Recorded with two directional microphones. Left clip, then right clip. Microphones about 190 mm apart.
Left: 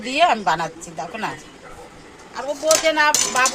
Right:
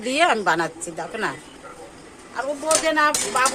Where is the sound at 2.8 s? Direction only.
25° right (ahead or behind).